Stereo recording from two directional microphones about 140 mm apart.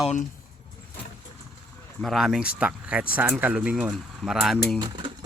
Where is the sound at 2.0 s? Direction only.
Centre (ahead or behind).